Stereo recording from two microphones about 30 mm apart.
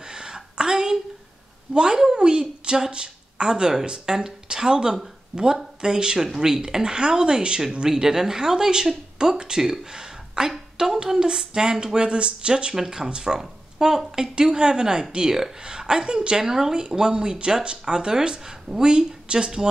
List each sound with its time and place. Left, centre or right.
0.0 s a sound: right
1.7 s a woman's voice: right
6.2 s speech: centre
7.9 s speech: centre; by 12.7 s right
12.7 s speech: centre